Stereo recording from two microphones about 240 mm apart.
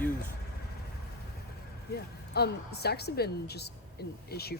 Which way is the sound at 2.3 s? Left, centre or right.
Left.